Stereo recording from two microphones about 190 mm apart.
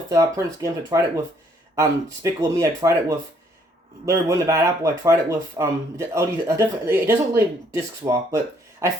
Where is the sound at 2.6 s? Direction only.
15° right (ahead or behind).